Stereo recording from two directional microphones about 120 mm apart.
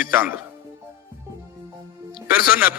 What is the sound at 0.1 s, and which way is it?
Speech, 15° right (ahead or behind).